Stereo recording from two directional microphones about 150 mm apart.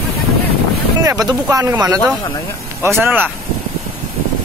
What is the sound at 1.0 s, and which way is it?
Speech, 25° right (ahead or behind).